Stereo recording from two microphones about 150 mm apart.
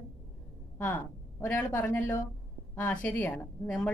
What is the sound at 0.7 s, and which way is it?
A woman's voice, 10° left (ahead or behind).